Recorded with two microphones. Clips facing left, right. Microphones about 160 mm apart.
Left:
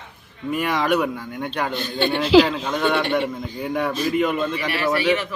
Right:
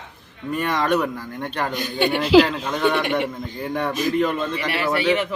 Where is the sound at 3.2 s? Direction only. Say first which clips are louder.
Left 1 dB; centre (ahead or behind).